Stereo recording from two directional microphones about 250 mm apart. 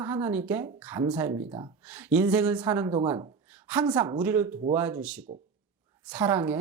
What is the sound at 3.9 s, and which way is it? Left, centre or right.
Speech, centre.